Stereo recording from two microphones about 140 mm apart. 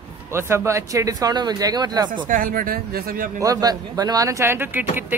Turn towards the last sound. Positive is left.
turn(degrees=-15)  # may be behind; listen again after turning